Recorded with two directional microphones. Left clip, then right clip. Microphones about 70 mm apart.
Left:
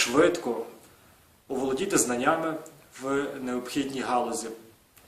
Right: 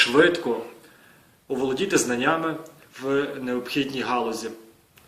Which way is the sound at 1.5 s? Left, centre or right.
Left.